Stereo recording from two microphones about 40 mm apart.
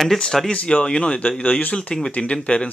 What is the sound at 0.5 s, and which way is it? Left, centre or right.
Speech, left.